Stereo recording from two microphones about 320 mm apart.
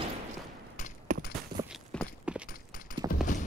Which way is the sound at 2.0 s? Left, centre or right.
Centre.